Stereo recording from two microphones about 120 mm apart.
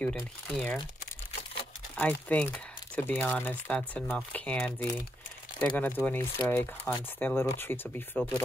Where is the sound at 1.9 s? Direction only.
10° left (ahead or behind).